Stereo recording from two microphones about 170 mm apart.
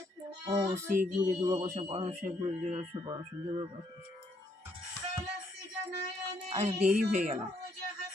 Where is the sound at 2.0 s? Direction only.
45° right (ahead or behind).